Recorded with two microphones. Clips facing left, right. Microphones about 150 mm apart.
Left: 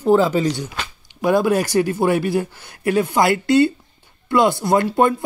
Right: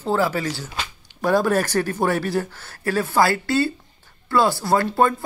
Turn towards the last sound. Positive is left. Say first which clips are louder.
# left 2 dB
turn(degrees=20)  # may be behind; listen again after turning